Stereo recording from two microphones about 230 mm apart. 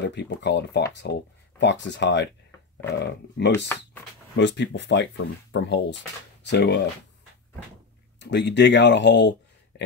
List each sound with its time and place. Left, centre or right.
0.0 s speech: left
8.2 s speech: left